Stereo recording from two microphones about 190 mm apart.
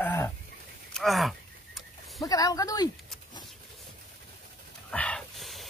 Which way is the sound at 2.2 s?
20° left (ahead or behind).